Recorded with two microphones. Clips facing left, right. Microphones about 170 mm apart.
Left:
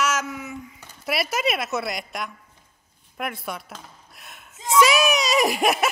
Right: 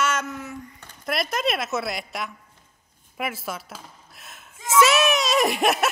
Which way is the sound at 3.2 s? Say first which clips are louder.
Even; 5° right (ahead or behind).